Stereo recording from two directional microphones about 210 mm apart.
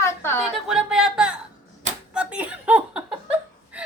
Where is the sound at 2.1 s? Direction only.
5° right (ahead or behind).